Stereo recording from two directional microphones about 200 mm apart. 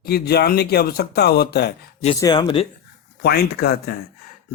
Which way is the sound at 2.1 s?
20° left (ahead or behind).